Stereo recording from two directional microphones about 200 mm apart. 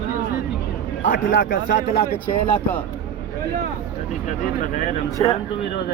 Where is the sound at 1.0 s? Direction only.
40° left (ahead or behind).